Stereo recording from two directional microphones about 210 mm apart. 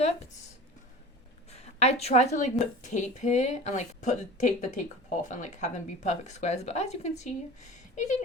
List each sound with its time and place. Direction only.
1.5 s a woman's voice: 30° left (ahead or behind)